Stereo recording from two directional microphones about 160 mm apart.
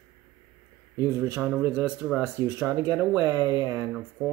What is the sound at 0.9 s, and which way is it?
Speech, 15° right (ahead or behind).